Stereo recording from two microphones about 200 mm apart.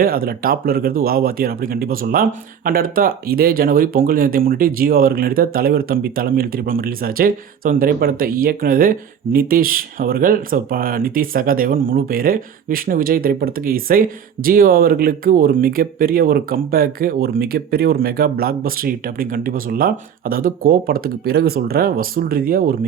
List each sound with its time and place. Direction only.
0.0 s speech: 45° right (ahead or behind)